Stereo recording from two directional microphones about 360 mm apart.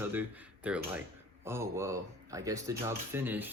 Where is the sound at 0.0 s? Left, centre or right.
Centre.